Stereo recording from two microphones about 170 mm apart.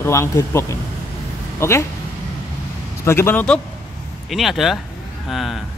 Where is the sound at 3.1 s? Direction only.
15° left (ahead or behind).